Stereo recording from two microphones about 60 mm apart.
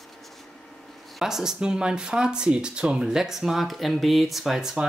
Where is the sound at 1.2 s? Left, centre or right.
Centre.